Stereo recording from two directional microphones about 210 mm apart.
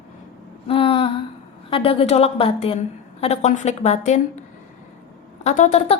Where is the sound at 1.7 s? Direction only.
25° left (ahead or behind).